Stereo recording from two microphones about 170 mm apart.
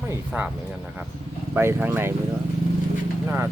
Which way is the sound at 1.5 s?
15° right (ahead or behind).